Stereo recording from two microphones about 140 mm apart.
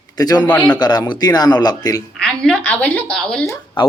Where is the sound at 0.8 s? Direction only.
30° left (ahead or behind).